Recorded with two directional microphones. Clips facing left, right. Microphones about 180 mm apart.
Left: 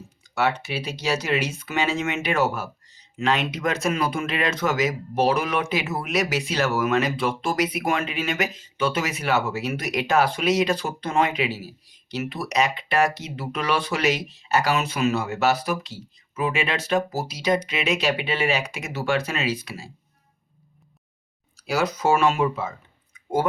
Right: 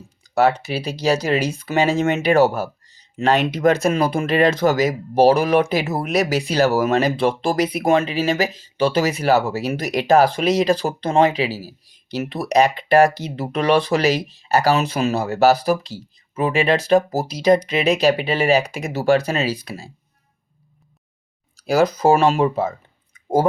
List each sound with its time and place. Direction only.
0.3 s speech: 35° right (ahead or behind)
21.5 s speech: 35° right (ahead or behind)